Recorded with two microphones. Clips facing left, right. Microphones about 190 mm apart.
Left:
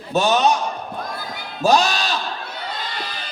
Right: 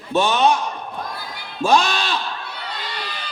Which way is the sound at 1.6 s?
35° left (ahead or behind).